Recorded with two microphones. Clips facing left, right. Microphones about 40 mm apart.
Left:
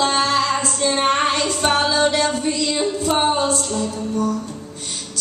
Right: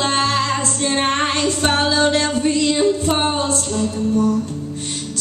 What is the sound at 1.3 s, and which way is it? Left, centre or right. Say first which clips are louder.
Female singing: right 1 dB; right.